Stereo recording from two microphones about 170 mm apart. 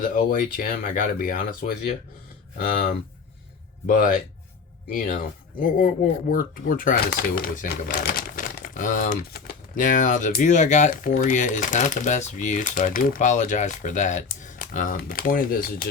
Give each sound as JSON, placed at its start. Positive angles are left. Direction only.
{"t": 0.0, "sound": "speech", "side_deg": 55}
{"t": 5.5, "sound": "speech", "side_deg": 50}